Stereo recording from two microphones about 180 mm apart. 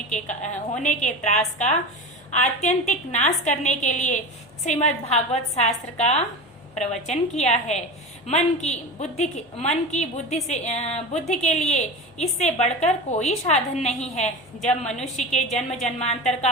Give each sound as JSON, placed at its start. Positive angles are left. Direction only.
{"t": 0.1, "sound": "a woman's voice", "side_deg": 40}